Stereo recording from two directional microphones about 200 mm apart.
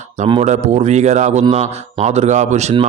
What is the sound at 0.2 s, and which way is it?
A man's voice, 30° right (ahead or behind).